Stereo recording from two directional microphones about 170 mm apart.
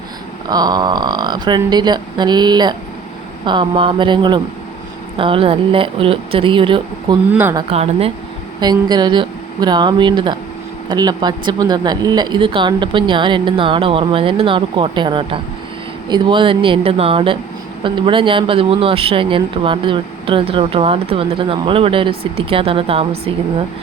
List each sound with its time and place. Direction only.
0.4 s speech: 25° right (ahead or behind)
8.6 s speech: 25° right (ahead or behind)